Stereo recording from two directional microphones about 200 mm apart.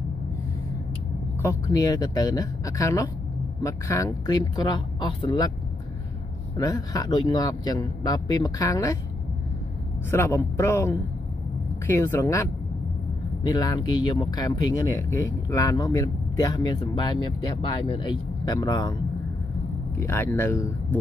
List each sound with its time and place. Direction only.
1.4 s speech: 15° left (ahead or behind)
6.5 s speech: 20° left (ahead or behind)
10.1 s speech: 15° left (ahead or behind)
20.0 s speech: 10° left (ahead or behind)